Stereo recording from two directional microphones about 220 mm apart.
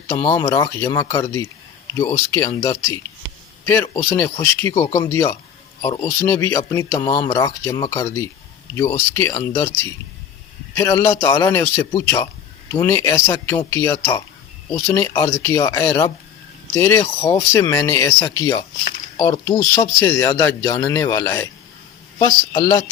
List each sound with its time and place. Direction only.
0.1 s speech: 10° left (ahead or behind)